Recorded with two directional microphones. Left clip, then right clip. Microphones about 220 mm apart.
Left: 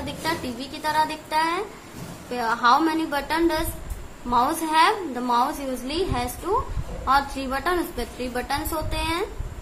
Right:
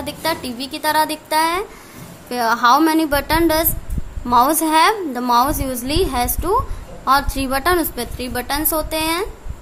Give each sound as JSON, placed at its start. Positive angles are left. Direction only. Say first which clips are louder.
{"t": 0.0, "sound": "a woman's voice", "louder": "right 5 dB", "side_deg": -50}